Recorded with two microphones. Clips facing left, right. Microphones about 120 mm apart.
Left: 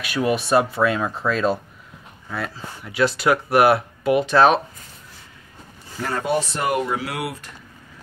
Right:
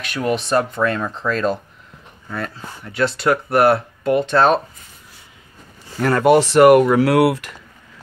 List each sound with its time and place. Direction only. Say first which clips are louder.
0.0 s speech: even; 10° left (ahead or behind)
5.9 s speech: right 9 dB; 65° right (ahead or behind); by 7.5 s 85° right